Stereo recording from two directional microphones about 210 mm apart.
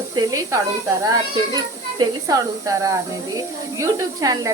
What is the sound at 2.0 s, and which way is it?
Speech, 15° right (ahead or behind).